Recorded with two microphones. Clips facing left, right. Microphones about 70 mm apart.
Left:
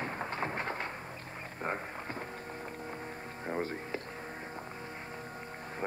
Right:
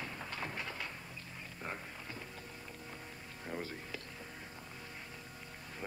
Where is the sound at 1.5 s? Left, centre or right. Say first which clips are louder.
Left 8 dB; left.